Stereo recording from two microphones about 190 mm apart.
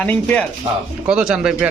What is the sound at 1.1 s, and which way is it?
Speech, 5° right (ahead or behind).